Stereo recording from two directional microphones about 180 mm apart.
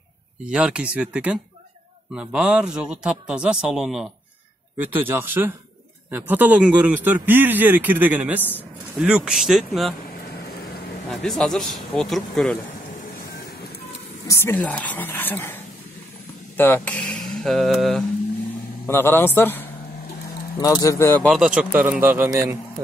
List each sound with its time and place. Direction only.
0.5 s a man's voice: 5° right (ahead or behind)
11.1 s a man's voice: centre (ahead or behind)
14.2 s speech: 15° left (ahead or behind)
18.9 s speech: 10° left (ahead or behind)
21.3 s speech: 5° right (ahead or behind)